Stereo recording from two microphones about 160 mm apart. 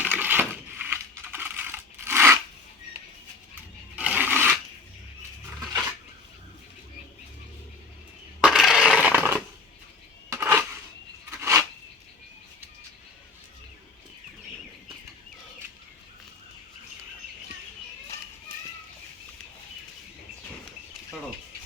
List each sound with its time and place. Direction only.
0.0 s crushing: 10° right (ahead or behind)
1.3 s tearing: 10° right (ahead or behind)
3.9 s a sound: 10° right (ahead or behind)
8.4 s crushing: 5° right (ahead or behind)
10.2 s a sound: 15° right (ahead or behind)
18.1 s children playing: 20° left (ahead or behind)